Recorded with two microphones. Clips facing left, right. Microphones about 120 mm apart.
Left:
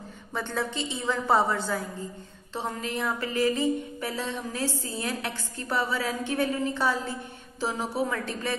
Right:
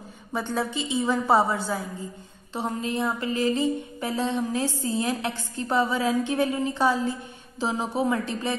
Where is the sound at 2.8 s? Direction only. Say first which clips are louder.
Right 3 dB; 20° right (ahead or behind).